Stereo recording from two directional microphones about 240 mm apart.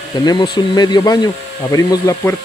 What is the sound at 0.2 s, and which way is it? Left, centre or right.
Speech, centre.